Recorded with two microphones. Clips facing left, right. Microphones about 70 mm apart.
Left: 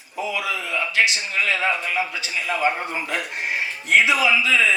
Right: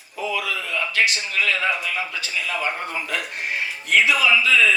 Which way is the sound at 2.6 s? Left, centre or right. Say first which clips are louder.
Left 6 dB; left.